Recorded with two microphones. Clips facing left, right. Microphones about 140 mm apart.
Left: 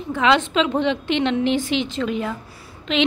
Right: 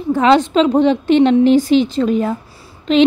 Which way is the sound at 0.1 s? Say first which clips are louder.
Right 6 dB; 35° right (ahead or behind).